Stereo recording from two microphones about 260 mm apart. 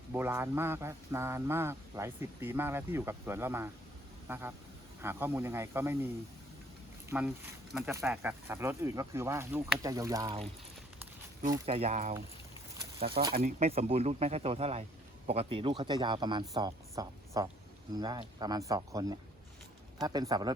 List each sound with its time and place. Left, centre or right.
0.1 s speech: centre
7.1 s speech: centre
11.0 s walk: centre
11.6 s speech: right
13.3 s speech: right